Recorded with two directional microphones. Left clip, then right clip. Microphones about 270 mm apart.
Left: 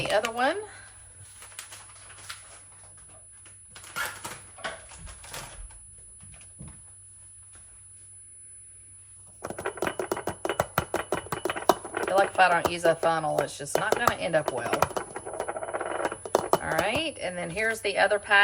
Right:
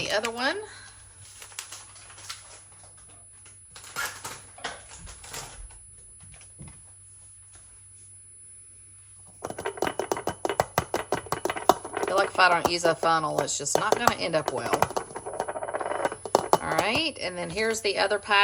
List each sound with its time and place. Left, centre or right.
0.0 s speech: centre
9.4 s typewriter: centre
11.9 s a sound: centre
16.6 s speech: centre